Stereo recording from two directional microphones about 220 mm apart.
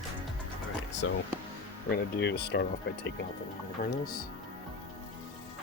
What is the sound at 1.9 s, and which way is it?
Speech, 50° left (ahead or behind).